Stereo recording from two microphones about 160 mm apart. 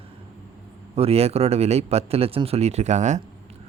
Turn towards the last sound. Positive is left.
turn(degrees=-50)  # may be behind; listen again after turning